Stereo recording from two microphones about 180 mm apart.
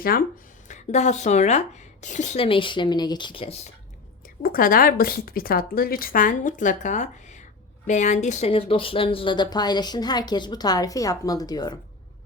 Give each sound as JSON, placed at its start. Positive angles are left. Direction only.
{"t": 0.0, "sound": "a woman's voice", "side_deg": 55}
{"t": 0.7, "sound": "speech", "side_deg": 40}
{"t": 4.4, "sound": "a woman's voice", "side_deg": 50}